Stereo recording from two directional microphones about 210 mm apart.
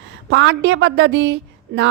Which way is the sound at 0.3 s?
60° right (ahead or behind).